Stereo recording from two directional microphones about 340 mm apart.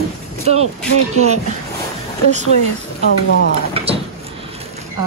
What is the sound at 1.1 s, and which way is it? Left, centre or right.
Speech, centre.